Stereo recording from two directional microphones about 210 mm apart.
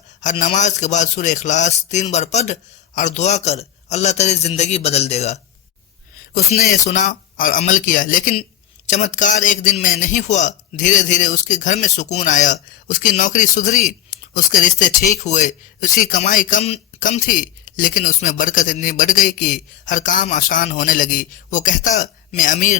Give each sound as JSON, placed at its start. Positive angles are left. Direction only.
{"t": 0.2, "sound": "speech", "side_deg": 35}
{"t": 6.5, "sound": "speech", "side_deg": 35}